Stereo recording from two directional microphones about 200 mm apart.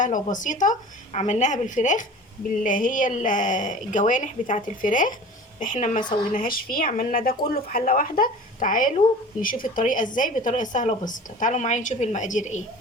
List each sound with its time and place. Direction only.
0.0 s speech: 40° left (ahead or behind)